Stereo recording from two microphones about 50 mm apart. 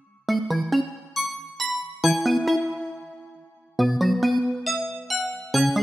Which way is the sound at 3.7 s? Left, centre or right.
Centre.